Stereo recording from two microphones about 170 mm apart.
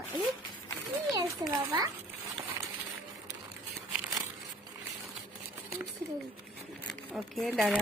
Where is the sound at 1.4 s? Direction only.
20° right (ahead or behind).